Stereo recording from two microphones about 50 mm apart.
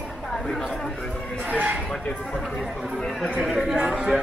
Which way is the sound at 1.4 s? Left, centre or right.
Right.